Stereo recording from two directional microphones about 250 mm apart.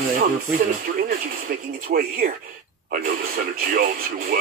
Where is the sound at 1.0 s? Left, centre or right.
Right.